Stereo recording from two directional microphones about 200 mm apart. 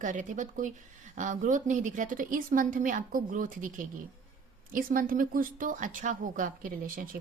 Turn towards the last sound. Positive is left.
turn(degrees=-45)  # may be behind; listen again after turning